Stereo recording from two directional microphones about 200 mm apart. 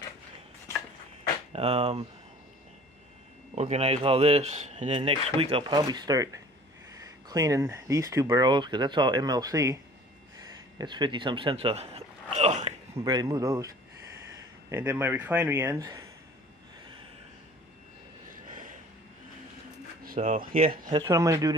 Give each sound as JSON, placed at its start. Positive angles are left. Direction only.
{"t": 1.5, "sound": "speech", "side_deg": -30}
{"t": 3.5, "sound": "speech", "side_deg": -30}
{"t": 10.8, "sound": "speech", "side_deg": -20}
{"t": 12.9, "sound": "speech", "side_deg": -20}
{"t": 14.7, "sound": "speech", "side_deg": -10}
{"t": 18.5, "sound": "a sound", "side_deg": -40}
{"t": 20.1, "sound": "speech", "side_deg": -40}
{"t": 20.9, "sound": "speech", "side_deg": -15}